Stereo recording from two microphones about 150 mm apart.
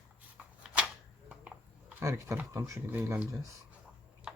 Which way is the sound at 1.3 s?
5° right (ahead or behind).